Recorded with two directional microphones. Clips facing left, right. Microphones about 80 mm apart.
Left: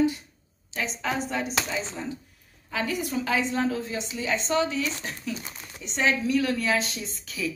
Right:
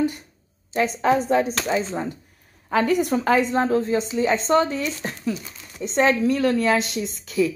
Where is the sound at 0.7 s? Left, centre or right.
Right.